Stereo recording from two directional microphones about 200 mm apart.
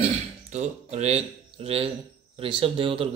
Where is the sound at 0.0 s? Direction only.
35° right (ahead or behind).